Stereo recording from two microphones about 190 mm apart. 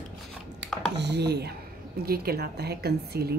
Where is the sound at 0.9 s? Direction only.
60° right (ahead or behind).